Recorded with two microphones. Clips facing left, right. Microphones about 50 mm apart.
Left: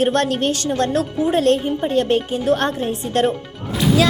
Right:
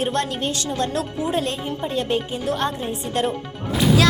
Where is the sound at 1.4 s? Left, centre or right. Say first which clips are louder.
Left 9 dB; left.